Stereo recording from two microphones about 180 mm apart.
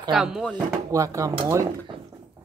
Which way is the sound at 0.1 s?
Centre (ahead or behind).